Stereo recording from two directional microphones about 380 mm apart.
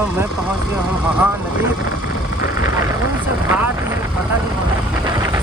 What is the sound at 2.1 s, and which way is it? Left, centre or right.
Vehicle, left.